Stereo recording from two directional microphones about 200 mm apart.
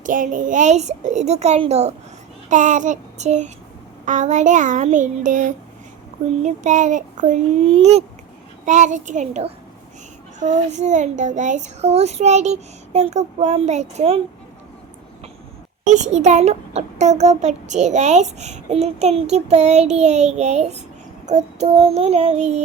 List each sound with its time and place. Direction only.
0.0 s a child's voice: 40° right (ahead or behind)
15.9 s a child's voice: 35° right (ahead or behind)